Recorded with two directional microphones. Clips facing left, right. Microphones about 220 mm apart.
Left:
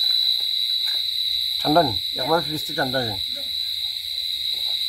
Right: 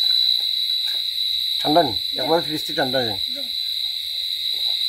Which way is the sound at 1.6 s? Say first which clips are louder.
Right 1 dB; 10° right (ahead or behind).